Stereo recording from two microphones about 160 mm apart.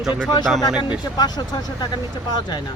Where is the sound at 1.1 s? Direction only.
25° left (ahead or behind).